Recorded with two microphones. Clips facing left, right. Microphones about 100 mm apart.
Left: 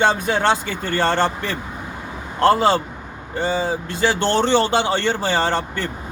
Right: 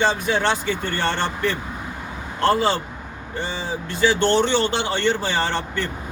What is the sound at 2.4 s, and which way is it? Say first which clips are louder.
Speech: left 4 dB; 40° left (ahead or behind).